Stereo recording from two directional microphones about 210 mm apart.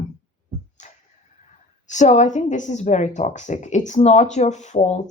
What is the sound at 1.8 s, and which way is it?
Speech, 35° left (ahead or behind).